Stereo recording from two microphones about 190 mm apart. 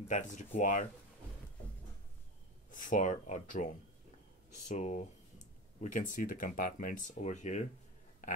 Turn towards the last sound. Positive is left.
turn(degrees=40)  # may be behind; listen again after turning